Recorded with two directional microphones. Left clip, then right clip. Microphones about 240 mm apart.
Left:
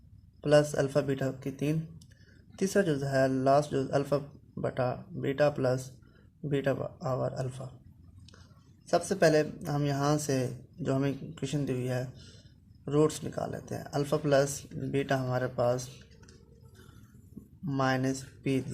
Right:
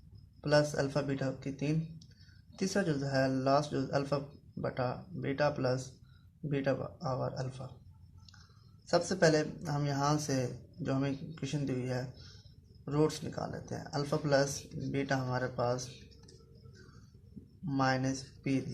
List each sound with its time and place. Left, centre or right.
0.4 s speech: left
8.9 s speech: left
17.7 s speech: left